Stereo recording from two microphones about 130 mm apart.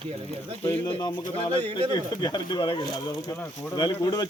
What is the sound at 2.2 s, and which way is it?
Speech, 35° left (ahead or behind).